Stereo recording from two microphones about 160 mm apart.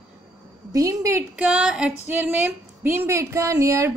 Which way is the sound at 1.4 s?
5° right (ahead or behind).